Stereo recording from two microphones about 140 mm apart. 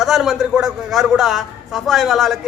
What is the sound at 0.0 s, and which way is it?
A man's voice, centre (ahead or behind).